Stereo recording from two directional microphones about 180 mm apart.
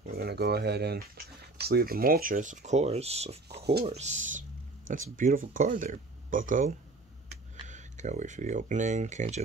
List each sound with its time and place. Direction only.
0.0 s speech: 60° right (ahead or behind); by 9.4 s 40° right (ahead or behind)